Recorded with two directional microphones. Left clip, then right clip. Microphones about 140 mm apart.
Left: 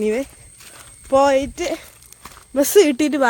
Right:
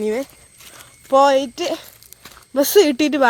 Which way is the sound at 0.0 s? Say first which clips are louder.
Left 1 dB; 20° left (ahead or behind).